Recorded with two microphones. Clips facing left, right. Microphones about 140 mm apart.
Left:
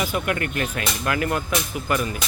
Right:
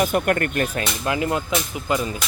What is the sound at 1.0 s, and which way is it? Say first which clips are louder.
Speech: right 1 dB; 20° right (ahead or behind).